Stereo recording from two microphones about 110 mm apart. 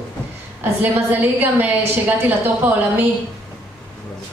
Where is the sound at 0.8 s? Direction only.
15° right (ahead or behind).